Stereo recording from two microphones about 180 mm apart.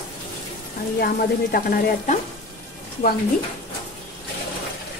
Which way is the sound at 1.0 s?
55° left (ahead or behind).